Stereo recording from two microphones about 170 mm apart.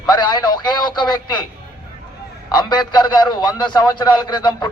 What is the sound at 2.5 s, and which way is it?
A man's voice, 25° left (ahead or behind).